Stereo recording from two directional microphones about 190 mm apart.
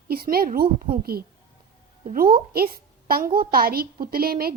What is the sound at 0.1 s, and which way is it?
A woman's voice, 50° right (ahead or behind).